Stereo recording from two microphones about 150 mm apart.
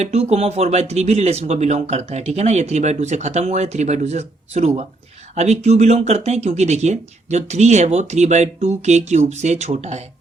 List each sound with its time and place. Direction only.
0.0 s speech: 45° right (ahead or behind)